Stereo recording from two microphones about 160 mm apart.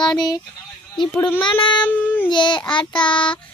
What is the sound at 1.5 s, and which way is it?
Speech, 30° left (ahead or behind).